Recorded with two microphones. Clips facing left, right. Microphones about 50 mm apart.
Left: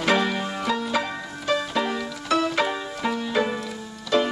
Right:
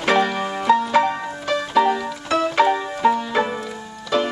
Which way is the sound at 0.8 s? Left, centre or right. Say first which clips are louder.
Right 8 dB; right.